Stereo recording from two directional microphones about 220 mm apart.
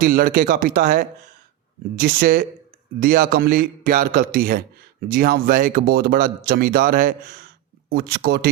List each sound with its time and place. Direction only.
0.0 s a man's voice: 40° right (ahead or behind)